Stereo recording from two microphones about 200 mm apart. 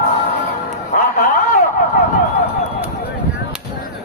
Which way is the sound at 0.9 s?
40° left (ahead or behind).